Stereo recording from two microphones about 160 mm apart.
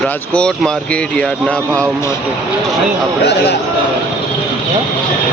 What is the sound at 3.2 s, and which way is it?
Speech, 90° left.